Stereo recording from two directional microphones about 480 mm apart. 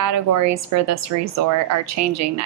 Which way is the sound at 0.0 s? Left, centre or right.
Right.